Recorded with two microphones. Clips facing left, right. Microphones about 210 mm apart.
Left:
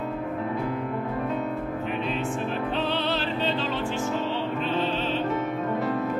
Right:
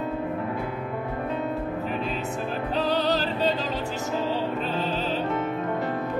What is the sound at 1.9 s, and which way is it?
Music, 40° right (ahead or behind).